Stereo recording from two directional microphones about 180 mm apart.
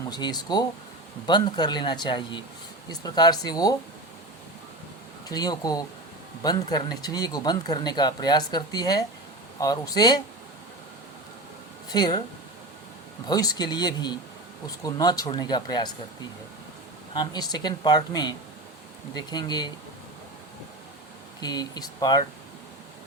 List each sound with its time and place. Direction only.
0.1 s speech: 25° left (ahead or behind)
5.3 s speech: 20° left (ahead or behind)
11.9 s speech: 20° left (ahead or behind)
13.2 s speech: 20° left (ahead or behind)
17.2 s speech: 20° left (ahead or behind)
21.4 s speech: 20° left (ahead or behind)